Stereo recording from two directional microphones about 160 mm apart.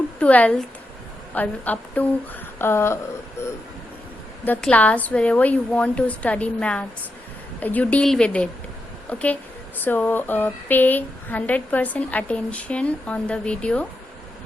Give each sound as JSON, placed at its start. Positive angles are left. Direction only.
{"t": 0.2, "sound": "speech", "side_deg": 10}